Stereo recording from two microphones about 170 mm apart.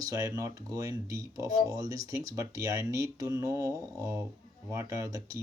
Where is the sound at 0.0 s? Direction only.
20° right (ahead or behind).